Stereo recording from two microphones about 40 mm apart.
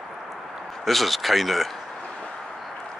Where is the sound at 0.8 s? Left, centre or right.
Centre.